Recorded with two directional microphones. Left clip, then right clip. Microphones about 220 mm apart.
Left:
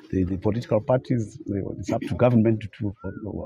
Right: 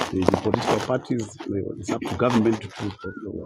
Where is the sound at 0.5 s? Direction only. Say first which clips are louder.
Even; 25° left (ahead or behind).